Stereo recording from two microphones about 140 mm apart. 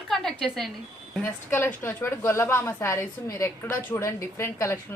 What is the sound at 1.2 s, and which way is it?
A woman's voice, 15° left (ahead or behind).